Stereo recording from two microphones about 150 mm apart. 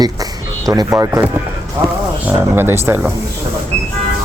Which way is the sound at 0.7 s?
20° right (ahead or behind).